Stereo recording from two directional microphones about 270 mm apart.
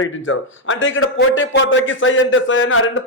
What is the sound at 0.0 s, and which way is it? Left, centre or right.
A man's voice, left.